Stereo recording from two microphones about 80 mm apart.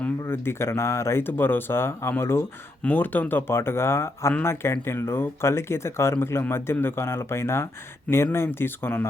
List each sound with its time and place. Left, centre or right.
0.3 s speech: left